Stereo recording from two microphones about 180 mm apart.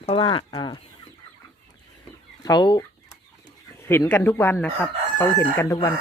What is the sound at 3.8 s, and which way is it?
Speech, 15° left (ahead or behind).